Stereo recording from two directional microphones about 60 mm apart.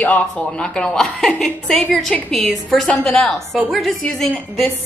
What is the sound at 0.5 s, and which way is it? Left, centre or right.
A woman's voice, centre.